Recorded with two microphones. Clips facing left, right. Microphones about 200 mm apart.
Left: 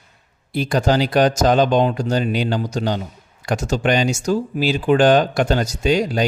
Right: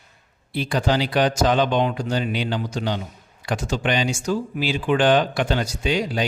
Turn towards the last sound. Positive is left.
turn(degrees=45)  # may be behind; listen again after turning